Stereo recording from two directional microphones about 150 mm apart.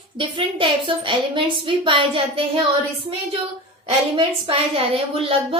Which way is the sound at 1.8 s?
35° right (ahead or behind).